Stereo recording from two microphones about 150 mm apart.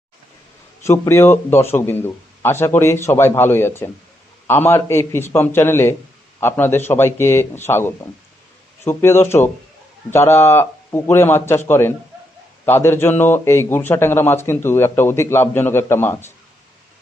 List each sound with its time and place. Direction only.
0.9 s a man's voice: 15° left (ahead or behind)